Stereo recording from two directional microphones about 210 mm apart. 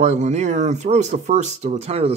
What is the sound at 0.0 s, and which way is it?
Speech, 30° right (ahead or behind).